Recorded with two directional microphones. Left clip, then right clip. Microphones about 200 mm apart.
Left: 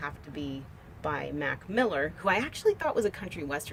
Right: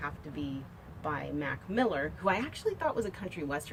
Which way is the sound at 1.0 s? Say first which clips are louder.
Left 3 dB; 55° left (ahead or behind).